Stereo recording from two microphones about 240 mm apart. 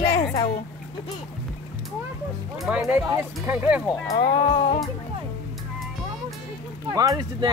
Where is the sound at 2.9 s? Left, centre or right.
Centre.